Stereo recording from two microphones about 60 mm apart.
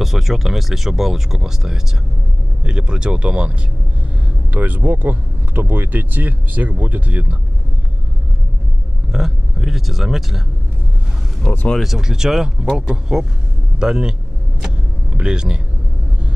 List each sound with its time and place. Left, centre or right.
0.0 s speech: centre; by 7.3 s right
9.1 s speech: centre
11.5 s speech: left
11.8 s speech: centre
15.1 s speech: centre